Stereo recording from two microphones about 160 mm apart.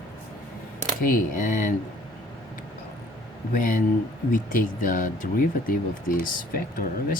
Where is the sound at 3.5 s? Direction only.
55° left (ahead or behind).